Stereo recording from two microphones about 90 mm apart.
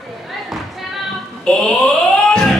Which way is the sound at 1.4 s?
10° left (ahead or behind).